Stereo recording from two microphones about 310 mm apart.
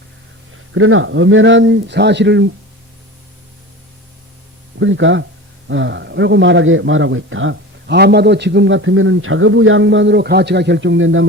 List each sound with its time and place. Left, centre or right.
0.7 s speech: right
4.8 s speech: right